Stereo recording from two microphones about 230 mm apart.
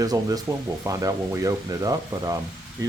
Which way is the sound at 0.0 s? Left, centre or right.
Centre.